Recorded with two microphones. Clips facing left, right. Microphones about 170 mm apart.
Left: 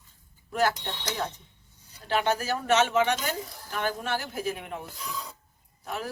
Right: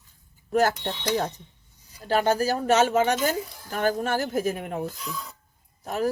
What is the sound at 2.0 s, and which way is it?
Speech, 40° right (ahead or behind).